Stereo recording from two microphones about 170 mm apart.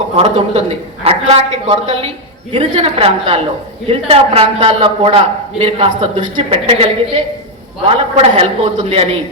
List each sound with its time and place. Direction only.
0.2 s a man's voice: 35° right (ahead or behind)